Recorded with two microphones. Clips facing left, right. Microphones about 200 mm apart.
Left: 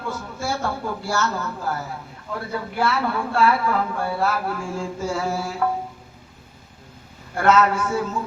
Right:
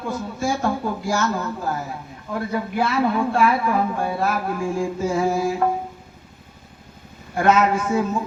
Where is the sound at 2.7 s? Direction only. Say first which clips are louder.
Right 2 dB; 15° right (ahead or behind).